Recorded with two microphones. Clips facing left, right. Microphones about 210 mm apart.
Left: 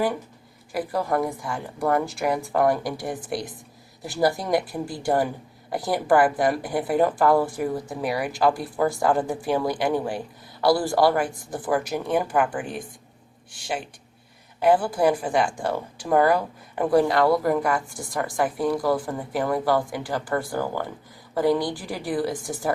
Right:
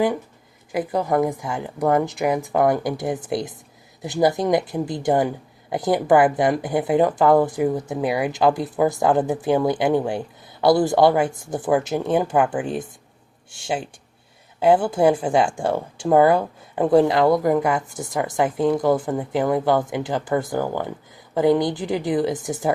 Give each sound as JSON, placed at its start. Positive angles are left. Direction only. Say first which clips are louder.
{"t": 0.7, "sound": "speech", "louder": "right 3 dB", "side_deg": -20}